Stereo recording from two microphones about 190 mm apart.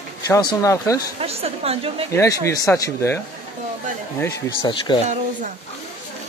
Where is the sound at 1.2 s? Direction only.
30° right (ahead or behind).